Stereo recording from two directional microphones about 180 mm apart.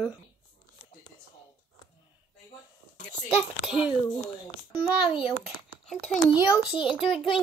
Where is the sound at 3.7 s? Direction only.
5° right (ahead or behind).